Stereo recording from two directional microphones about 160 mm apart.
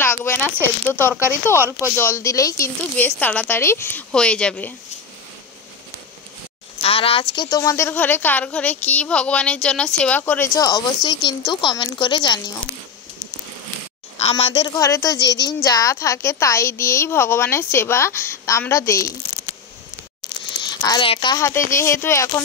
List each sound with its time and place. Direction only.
0.0 s a sound: 15° left (ahead or behind)
0.8 s a woman's voice: 15° left (ahead or behind)
1.6 s speech: 15° right (ahead or behind)
2.0 s a woman's voice: 15° left (ahead or behind)
6.8 s a woman's voice: 35° left (ahead or behind)
14.1 s a woman's voice: 40° left (ahead or behind)
14.8 s a woman's voice: 20° left (ahead or behind)
20.8 s a child's voice: 30° left (ahead or behind)
21.4 s a woman's voice: 15° left (ahead or behind)